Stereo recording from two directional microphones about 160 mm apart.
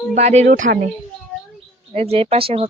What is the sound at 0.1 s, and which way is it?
Speech, 45° right (ahead or behind).